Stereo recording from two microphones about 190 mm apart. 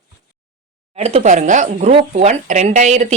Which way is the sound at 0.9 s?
35° right (ahead or behind).